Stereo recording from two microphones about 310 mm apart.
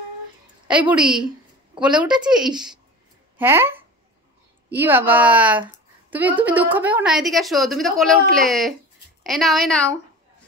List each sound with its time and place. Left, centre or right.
0.7 s a woman's voice: centre